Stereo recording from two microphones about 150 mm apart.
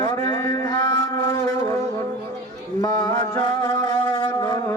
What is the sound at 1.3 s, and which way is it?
Music, 20° left (ahead or behind).